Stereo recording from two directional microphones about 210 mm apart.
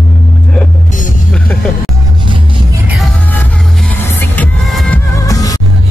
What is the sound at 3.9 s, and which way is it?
Music, 10° left (ahead or behind).